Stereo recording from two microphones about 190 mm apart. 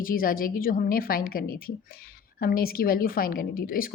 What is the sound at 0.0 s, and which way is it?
A woman's voice, 50° left (ahead or behind).